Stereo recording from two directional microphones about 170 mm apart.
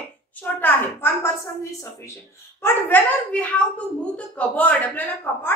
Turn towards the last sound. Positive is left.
turn(degrees=10)  # may be behind; listen again after turning